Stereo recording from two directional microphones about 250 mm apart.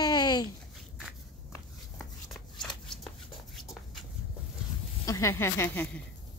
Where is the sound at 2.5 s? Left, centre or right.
Centre.